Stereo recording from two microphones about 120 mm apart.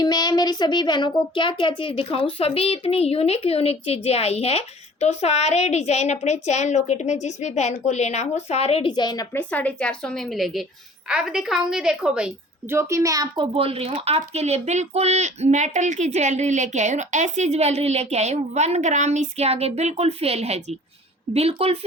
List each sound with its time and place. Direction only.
0.0 s a child's voice: 35° left (ahead or behind); by 8.9 s 55° left (ahead or behind)
8.9 s a woman's voice: 35° left (ahead or behind)
9.3 s a woman's voice: 15° left (ahead or behind); by 12.3 s 10° right (ahead or behind)
12.7 s a child's voice: 25° right (ahead or behind)
13.5 s speech: 55° right (ahead or behind)